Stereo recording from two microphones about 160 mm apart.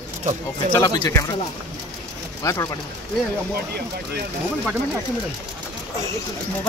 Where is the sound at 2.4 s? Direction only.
20° left (ahead or behind).